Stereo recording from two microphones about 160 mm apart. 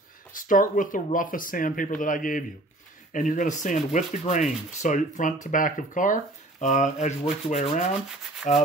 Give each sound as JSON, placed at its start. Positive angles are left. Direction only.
{"t": 0.4, "sound": "speech", "side_deg": 55}